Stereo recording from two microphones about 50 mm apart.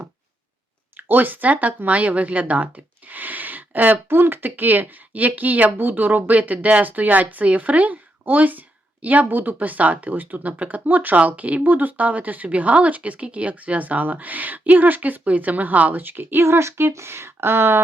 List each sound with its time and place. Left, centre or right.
0.9 s speech: right
4.1 s speech: right